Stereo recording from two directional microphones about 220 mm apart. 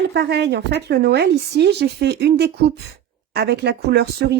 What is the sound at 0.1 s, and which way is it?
Speech, 50° right (ahead or behind).